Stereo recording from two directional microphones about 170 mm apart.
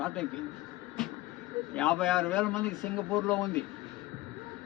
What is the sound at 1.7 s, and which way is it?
A man's voice, 5° left (ahead or behind).